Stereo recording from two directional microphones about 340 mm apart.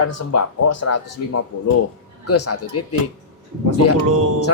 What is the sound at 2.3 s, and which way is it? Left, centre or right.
Speech, left.